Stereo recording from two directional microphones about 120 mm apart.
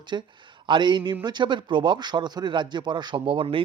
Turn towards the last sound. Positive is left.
turn(degrees=-45)  # may be behind; listen again after turning